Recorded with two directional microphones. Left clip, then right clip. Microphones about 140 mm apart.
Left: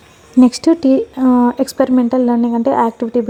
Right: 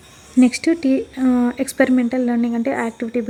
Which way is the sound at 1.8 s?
15° right (ahead or behind).